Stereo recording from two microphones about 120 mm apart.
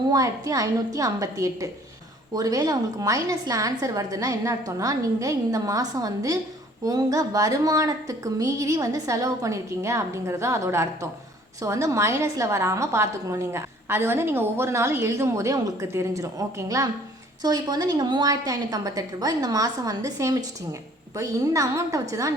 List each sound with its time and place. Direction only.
0.1 s a woman's voice: 30° right (ahead or behind)